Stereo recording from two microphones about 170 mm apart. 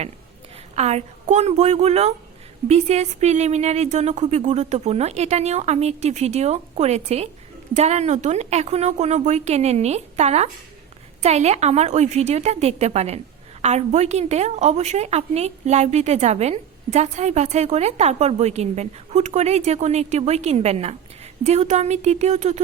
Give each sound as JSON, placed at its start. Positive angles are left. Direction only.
{"t": 0.8, "sound": "a woman's voice", "side_deg": -40}